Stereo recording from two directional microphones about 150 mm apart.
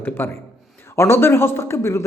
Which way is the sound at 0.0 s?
15° left (ahead or behind).